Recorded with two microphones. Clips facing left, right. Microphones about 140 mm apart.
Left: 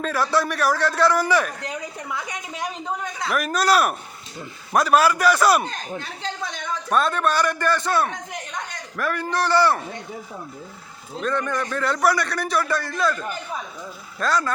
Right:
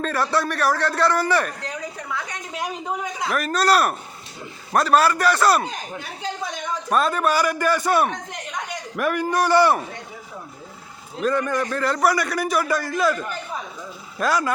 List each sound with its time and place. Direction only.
0.0 s a man's voice: centre (ahead or behind)
2.1 s a sound: 15° left (ahead or behind)
2.5 s speech: 5° right (ahead or behind)
3.2 s a man's voice: 10° left (ahead or behind)
5.6 s a man's voice: 10° right (ahead or behind)
11.2 s a man's voice: 10° right (ahead or behind)
14.2 s a man's voice: 5° right (ahead or behind)